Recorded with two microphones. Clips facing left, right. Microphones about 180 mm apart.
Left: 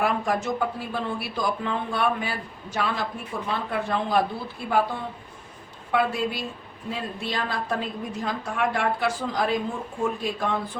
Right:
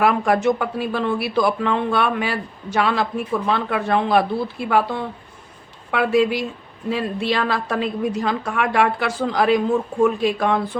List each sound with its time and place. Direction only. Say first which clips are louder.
0.0 s a woman's voice: right 7 dB; 75° right (ahead or behind)